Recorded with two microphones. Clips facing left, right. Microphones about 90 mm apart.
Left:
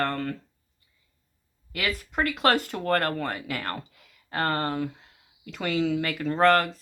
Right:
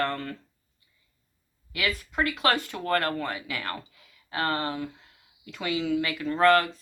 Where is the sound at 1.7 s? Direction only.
50° left (ahead or behind).